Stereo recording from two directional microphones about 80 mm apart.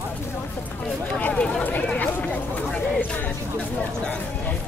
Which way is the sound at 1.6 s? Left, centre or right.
Left.